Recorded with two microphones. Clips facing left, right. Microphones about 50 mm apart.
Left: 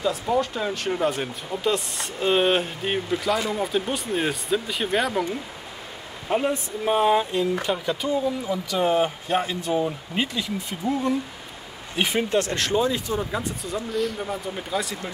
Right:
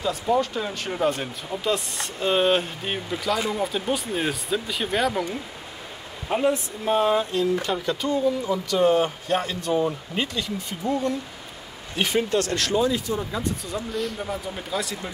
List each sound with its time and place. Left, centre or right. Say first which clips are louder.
0.0 s speech: even; centre
6.2 s speech: right 1 dB; centre; by 13.2 s left
13.4 s speech: right 1 dB; centre